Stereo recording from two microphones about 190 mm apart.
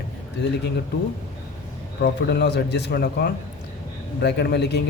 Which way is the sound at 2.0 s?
55° left (ahead or behind).